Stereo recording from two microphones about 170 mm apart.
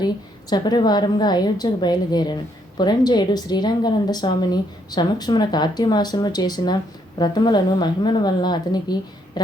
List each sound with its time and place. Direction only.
0.5 s a woman's voice: 25° left (ahead or behind)